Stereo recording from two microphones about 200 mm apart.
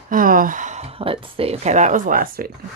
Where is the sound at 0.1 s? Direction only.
45° right (ahead or behind).